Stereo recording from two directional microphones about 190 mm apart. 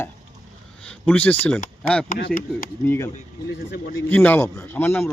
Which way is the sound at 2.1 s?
50° left (ahead or behind).